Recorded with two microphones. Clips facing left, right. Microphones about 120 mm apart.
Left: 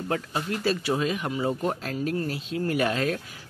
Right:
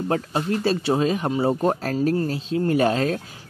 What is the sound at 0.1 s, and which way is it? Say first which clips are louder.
Speech: right 4 dB; 30° right (ahead or behind).